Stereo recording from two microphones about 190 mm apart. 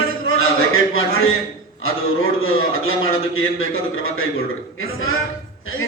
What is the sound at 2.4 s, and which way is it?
A man's voice, 90° left.